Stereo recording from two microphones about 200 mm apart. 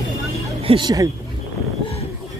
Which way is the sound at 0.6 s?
20° right (ahead or behind).